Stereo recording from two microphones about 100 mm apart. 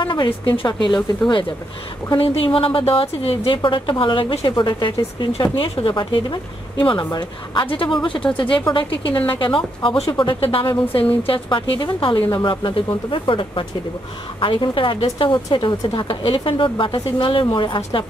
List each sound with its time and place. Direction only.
0.0 s speech: 50° left (ahead or behind)
2.1 s speech: 65° left (ahead or behind)
10.1 s speech: 60° left (ahead or behind)